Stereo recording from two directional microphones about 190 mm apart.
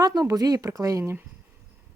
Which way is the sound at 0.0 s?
20° right (ahead or behind).